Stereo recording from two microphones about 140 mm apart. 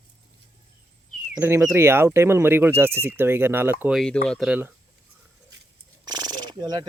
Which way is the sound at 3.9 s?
5° left (ahead or behind).